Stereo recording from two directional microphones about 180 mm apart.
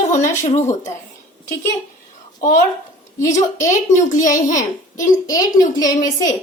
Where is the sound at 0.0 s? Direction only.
40° left (ahead or behind).